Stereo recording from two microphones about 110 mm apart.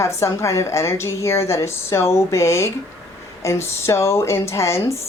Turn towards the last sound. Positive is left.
turn(degrees=25)  # may be behind; listen again after turning